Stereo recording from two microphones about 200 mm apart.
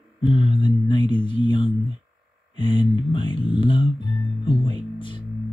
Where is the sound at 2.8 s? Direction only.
25° left (ahead or behind).